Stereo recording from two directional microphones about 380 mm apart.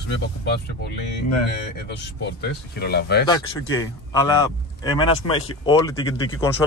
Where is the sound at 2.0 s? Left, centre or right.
Left.